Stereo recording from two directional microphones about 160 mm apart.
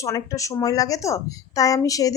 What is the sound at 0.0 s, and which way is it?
A woman's voice, 20° left (ahead or behind).